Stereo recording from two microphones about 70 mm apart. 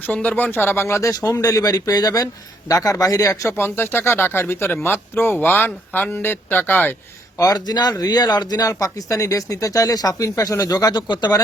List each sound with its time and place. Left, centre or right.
0.0 s a man's voice: centre; by 1.3 s left
1.4 s a man's voice: left
3.6 s a man's voice: left
7.3 s speech: left
8.7 s speech: left
10.2 s a man's voice: left